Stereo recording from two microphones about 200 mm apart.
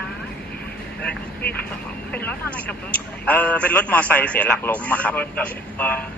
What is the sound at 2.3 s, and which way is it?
A man's voice, 5° left (ahead or behind).